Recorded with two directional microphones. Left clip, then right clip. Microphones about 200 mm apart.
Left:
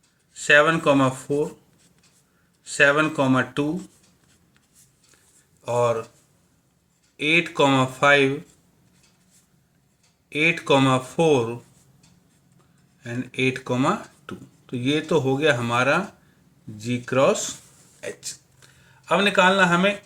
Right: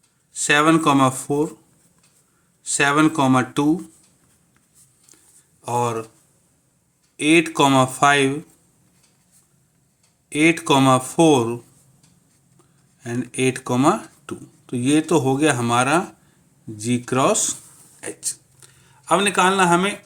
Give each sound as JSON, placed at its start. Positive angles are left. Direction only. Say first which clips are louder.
{"t": 0.3, "sound": "speech", "louder": "even", "side_deg": -50}
{"t": 2.6, "sound": "speech", "louder": "right 1 dB", "side_deg": -50}
{"t": 5.6, "sound": "speech", "louder": "left 1 dB", "side_deg": -45}
{"t": 7.2, "sound": "speech", "louder": "right 3 dB", "side_deg": -50}
{"t": 10.2, "sound": "speech", "louder": "right 3 dB", "side_deg": -50}
{"t": 13.0, "sound": "speech", "louder": "right 2 dB", "side_deg": -50}
{"t": 18.0, "sound": "a sound", "louder": "right 2 dB", "side_deg": -45}